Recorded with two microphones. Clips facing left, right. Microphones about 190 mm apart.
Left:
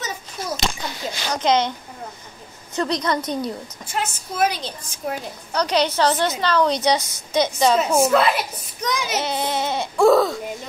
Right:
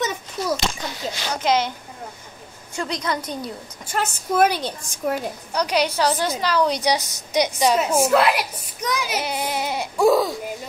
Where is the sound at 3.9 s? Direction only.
55° right (ahead or behind).